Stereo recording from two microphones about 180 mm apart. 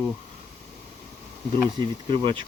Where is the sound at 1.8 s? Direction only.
25° right (ahead or behind).